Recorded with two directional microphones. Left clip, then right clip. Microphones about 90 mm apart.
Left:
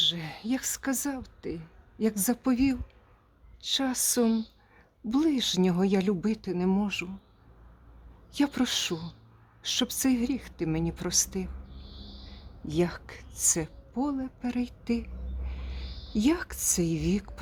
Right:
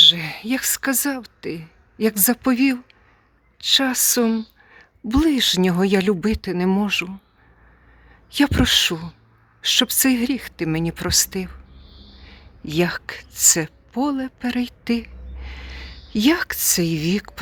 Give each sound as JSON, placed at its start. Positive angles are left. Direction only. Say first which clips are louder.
{"t": 0.0, "sound": "speech", "louder": "right 14 dB", "side_deg": -35}
{"t": 5.0, "sound": "speech", "louder": "right 9 dB", "side_deg": -45}
{"t": 8.3, "sound": "a woman's voice", "louder": "right 11 dB", "side_deg": -45}